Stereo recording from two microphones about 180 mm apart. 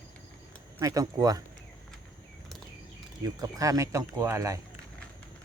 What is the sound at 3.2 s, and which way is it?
Speech, 20° right (ahead or behind).